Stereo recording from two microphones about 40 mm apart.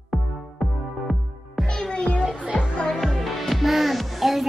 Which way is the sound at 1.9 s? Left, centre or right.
Left.